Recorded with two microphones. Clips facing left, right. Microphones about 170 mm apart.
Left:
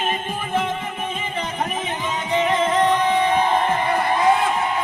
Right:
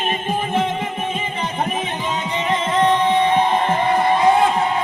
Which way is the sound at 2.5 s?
25° right (ahead or behind).